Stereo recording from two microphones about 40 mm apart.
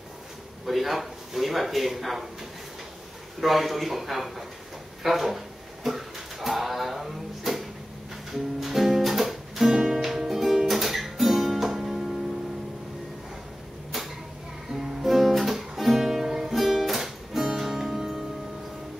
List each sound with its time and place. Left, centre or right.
0.7 s speech: centre
3.3 s speech: centre
5.9 s a sound: centre
8.3 s music: centre
9.8 s music: right
10.0 s music: centre
13.9 s a sound: centre
14.7 s guitar: centre